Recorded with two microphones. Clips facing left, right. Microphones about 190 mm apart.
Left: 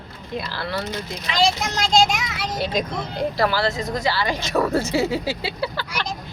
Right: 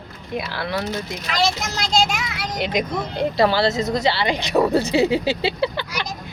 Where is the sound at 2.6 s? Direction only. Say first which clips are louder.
Right 2 dB; 15° right (ahead or behind).